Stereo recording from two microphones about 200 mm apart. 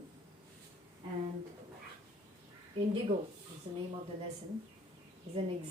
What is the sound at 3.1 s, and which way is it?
Speech, 30° right (ahead or behind).